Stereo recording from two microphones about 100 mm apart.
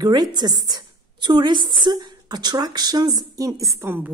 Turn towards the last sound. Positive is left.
turn(degrees=-35)  # may be behind; listen again after turning